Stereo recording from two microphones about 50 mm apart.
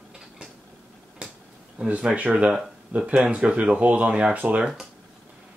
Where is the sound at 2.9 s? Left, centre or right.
Right.